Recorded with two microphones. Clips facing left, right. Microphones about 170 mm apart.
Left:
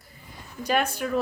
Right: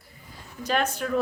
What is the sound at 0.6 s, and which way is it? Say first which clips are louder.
Speech: left 1 dB; 10° left (ahead or behind).